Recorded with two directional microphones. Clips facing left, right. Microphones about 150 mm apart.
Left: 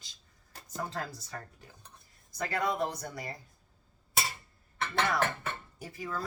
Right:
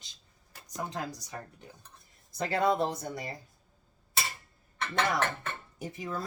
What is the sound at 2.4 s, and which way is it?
Speech, 30° right (ahead or behind).